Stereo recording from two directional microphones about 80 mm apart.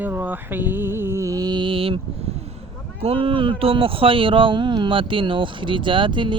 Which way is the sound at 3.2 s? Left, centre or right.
Right.